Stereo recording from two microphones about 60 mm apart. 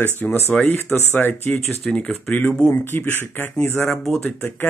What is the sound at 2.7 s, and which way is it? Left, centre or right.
Speech, left.